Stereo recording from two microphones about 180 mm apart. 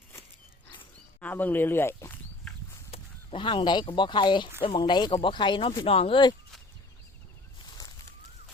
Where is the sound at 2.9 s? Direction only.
30° left (ahead or behind).